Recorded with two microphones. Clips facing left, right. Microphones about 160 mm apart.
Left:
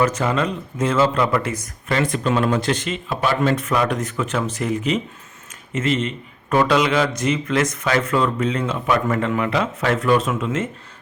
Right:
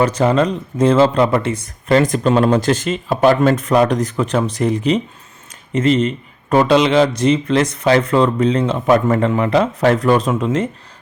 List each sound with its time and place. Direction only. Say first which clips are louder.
0.0 s a man's voice: right 5 dB; 35° right (ahead or behind)
6.6 s speech: right 5 dB; 25° right (ahead or behind)